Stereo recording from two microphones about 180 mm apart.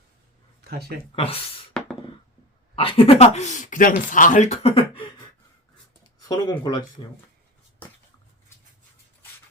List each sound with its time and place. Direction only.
0.6 s speech: 60° right (ahead or behind)
1.1 s speech: 30° left (ahead or behind)
1.7 s a sound: 5° left (ahead or behind)
2.7 s speech: 30° left (ahead or behind)
6.2 s speech: 20° left (ahead or behind)